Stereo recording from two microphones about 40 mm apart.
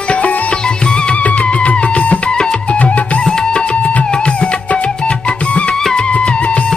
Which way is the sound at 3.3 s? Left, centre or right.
Centre.